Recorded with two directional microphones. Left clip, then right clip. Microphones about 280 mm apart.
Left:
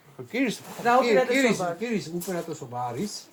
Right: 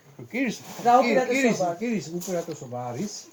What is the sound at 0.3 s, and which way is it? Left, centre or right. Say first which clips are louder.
Speech: left 1 dB; left.